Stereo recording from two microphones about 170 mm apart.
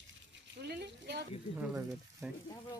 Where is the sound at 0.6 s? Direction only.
80° right.